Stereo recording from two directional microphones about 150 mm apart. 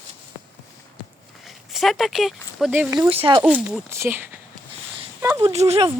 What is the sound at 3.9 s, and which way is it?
Speech, 15° right (ahead or behind).